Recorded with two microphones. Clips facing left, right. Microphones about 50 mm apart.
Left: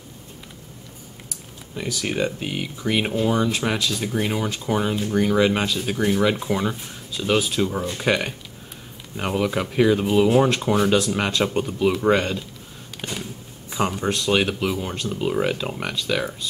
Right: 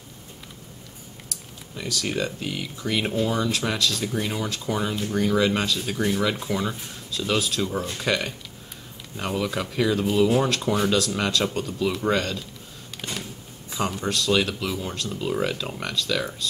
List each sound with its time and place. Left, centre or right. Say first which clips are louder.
1.8 s speech: left 3 dB; centre
13.0 s a sound: left 2 dB; left
13.7 s speech: left 4 dB; left